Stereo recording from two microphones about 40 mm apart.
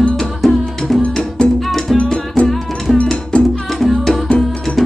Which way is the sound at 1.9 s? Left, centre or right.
Left.